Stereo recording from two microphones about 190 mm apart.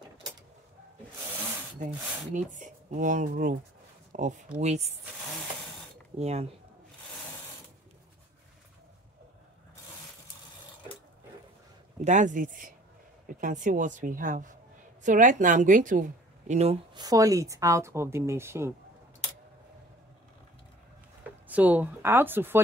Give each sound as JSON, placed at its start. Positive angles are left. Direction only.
{"t": 2.3, "sound": "a woman's voice", "side_deg": -40}
{"t": 6.1, "sound": "speech", "side_deg": -35}
{"t": 12.0, "sound": "a woman's voice", "side_deg": -40}
{"t": 16.9, "sound": "a woman's voice", "side_deg": -20}
{"t": 21.5, "sound": "a woman's voice", "side_deg": -10}